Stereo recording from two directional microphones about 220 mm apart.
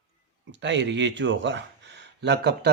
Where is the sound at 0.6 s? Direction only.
55° right (ahead or behind).